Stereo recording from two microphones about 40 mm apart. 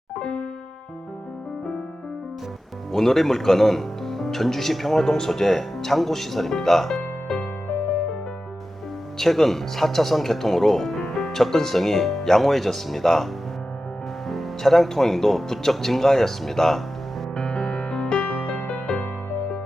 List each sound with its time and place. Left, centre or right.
0.2 s music: left
2.9 s speech: centre
9.1 s speech: centre
14.3 s speech: centre
17.3 s music: centre
18.3 s music: left